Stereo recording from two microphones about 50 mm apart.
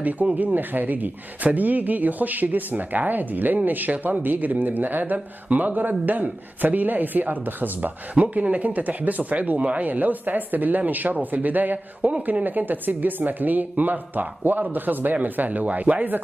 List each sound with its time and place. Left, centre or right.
0.0 s speech: right